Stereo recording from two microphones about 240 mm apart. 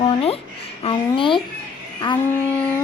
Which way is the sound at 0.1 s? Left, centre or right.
Left.